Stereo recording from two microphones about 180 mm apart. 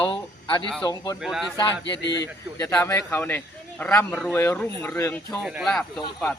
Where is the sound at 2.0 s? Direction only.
75° left (ahead or behind).